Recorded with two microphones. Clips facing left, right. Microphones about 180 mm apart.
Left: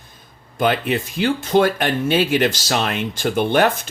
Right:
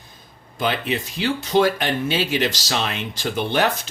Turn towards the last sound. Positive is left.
turn(degrees=50)  # may be behind; listen again after turning